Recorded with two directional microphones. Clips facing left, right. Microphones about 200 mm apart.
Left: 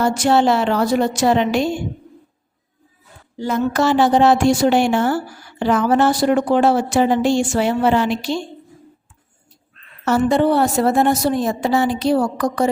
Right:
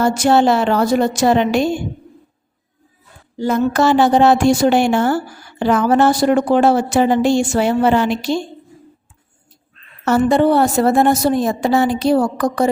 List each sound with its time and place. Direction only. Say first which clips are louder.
0.0 s a woman's voice: right 2 dB; 45° right (ahead or behind)
3.3 s a woman's voice: right 3 dB; 45° right (ahead or behind)
10.1 s a woman's voice: right 2 dB; 50° right (ahead or behind)